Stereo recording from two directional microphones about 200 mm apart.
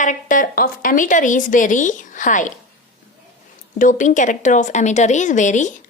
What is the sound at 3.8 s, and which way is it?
Speech, 40° left (ahead or behind).